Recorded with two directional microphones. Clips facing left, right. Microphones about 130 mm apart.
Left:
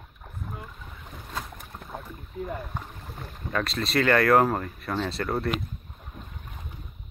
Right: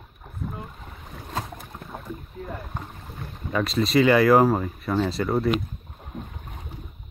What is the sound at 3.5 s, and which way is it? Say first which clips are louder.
Speech: right 5 dB; centre (ahead or behind).